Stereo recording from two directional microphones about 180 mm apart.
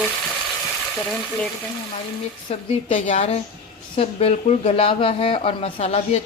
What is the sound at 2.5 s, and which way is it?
Speech, 35° left (ahead or behind).